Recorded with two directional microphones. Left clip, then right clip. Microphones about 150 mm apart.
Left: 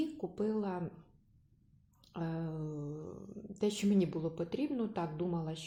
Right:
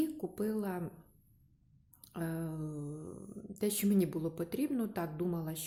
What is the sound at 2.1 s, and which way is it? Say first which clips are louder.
A woman's voice: right 1 dB; 20° right (ahead or behind).